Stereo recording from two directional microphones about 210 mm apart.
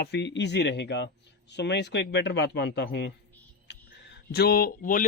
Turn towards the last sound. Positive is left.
turn(degrees=45)  # may be behind; listen again after turning